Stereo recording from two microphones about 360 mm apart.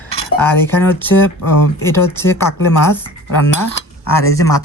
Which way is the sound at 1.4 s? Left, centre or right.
Left.